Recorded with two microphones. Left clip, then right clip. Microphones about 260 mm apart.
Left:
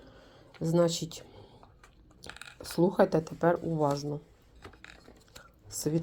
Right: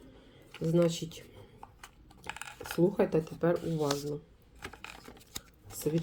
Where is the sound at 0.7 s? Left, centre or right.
Left.